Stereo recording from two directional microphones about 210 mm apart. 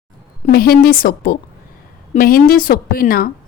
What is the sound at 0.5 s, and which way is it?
A woman's voice, 45° left (ahead or behind).